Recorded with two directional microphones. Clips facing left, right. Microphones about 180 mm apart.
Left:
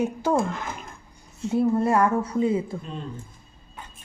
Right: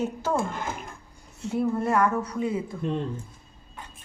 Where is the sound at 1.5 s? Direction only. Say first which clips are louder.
Left 4 dB; 30° left (ahead or behind).